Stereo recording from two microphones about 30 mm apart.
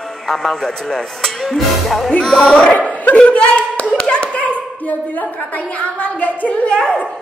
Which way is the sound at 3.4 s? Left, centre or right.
Left.